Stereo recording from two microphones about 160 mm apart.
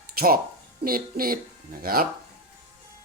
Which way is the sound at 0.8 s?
65° right (ahead or behind).